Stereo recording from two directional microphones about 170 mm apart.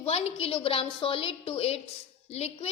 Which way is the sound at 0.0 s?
35° left (ahead or behind).